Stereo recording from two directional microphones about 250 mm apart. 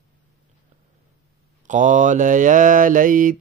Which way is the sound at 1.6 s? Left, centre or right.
Right.